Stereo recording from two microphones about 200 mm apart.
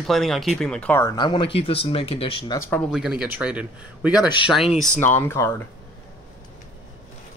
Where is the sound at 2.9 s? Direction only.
5° right (ahead or behind).